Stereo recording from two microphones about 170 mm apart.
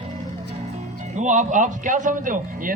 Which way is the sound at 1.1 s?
45° right (ahead or behind).